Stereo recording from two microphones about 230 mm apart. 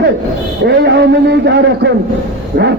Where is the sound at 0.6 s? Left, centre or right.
Right.